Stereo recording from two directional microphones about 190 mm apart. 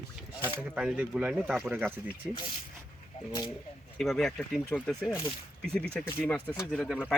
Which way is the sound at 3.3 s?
20° left (ahead or behind).